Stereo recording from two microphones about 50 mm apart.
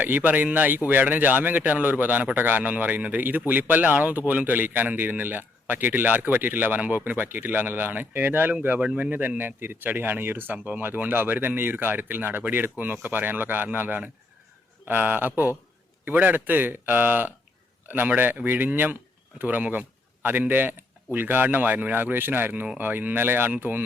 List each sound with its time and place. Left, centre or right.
0.0 s a man's voice: right